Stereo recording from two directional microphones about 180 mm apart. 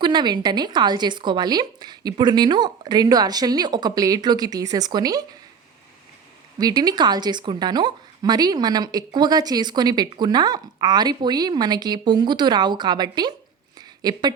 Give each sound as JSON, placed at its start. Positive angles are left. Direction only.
{"t": 0.0, "sound": "a woman's voice", "side_deg": -25}
{"t": 6.6, "sound": "a woman's voice", "side_deg": -20}
{"t": 13.7, "sound": "a sound", "side_deg": -20}